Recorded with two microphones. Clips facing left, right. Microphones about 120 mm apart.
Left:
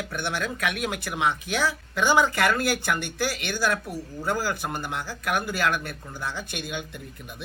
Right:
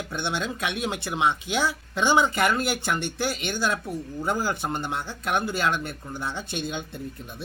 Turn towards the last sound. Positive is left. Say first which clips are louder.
# right 2 dB
turn(degrees=-25)  # may be behind; listen again after turning